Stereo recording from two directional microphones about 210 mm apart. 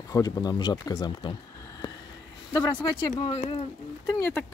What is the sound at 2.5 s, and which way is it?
Speech, 20° left (ahead or behind).